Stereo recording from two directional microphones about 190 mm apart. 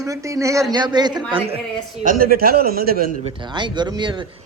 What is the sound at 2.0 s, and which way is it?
A man's voice, 50° right (ahead or behind).